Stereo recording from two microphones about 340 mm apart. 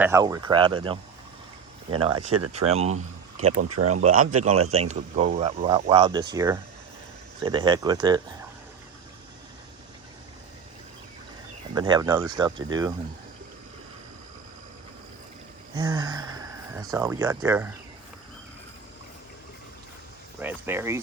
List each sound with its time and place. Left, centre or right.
0.0 s speech: centre
2.5 s speech: centre
3.6 s speech: right
4.7 s speech: centre
11.7 s speech: centre
15.7 s speech: centre
20.4 s speech: centre